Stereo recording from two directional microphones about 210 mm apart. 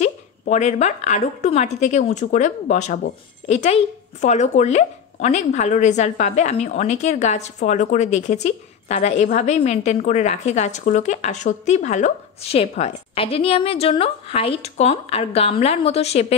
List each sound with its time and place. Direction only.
0.0 s a woman's voice: 35° left (ahead or behind)